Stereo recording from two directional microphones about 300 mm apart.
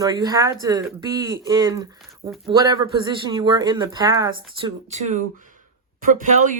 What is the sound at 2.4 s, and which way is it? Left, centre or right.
Speech, centre.